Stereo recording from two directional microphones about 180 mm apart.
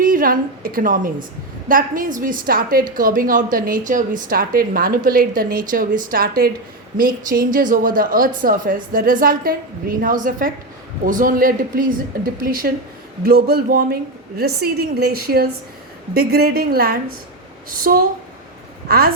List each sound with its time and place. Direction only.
0.0 s a woman's voice: 50° right (ahead or behind)